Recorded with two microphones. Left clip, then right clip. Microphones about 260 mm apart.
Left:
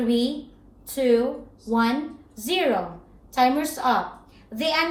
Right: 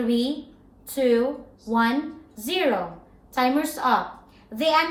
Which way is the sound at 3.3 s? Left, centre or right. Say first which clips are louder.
Left 2 dB; centre.